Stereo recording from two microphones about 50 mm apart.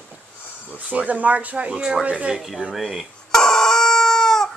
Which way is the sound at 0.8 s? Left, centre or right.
Right.